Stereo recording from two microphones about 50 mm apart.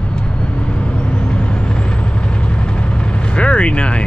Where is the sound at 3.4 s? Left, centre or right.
Left.